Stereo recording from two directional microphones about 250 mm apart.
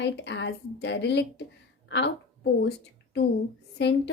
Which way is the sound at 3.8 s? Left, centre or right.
Left.